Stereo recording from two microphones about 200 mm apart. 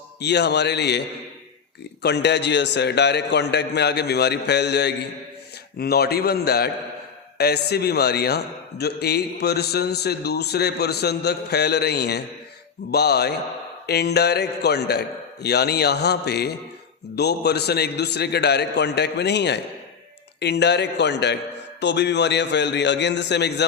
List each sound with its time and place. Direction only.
0.2 s a man's voice: 60° left (ahead or behind)